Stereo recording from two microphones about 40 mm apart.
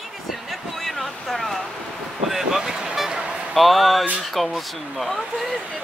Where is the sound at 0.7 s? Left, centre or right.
Centre.